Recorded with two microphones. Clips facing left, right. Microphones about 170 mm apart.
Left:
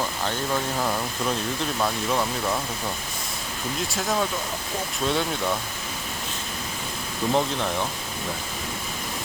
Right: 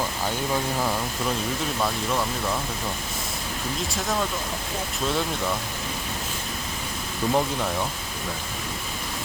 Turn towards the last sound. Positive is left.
turn(degrees=-5)  # may be behind; listen again after turning